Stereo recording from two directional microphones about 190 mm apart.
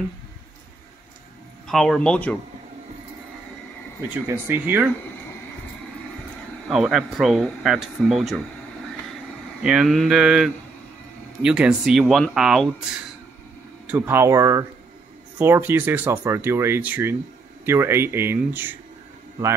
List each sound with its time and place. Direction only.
1.7 s speech: centre (ahead or behind)
4.1 s speech: 10° right (ahead or behind)
6.7 s speech: 5° right (ahead or behind)
9.6 s speech: 5° right (ahead or behind)
13.9 s speech: 15° right (ahead or behind)